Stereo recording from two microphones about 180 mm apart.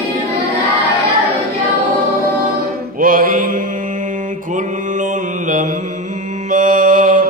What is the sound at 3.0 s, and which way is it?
Mantra, 50° right (ahead or behind).